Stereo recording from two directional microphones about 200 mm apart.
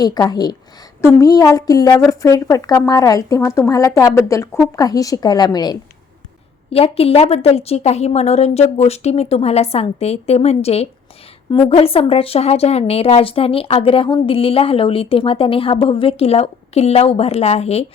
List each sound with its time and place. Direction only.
0.0 s a woman's voice: 20° left (ahead or behind)